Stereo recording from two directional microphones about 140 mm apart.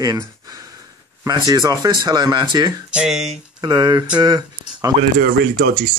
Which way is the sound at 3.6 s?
30° right (ahead or behind).